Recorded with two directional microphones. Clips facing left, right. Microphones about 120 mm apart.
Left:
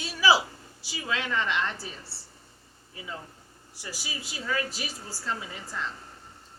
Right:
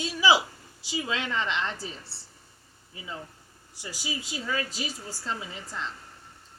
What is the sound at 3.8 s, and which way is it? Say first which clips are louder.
Speech: right 3 dB; 20° right (ahead or behind).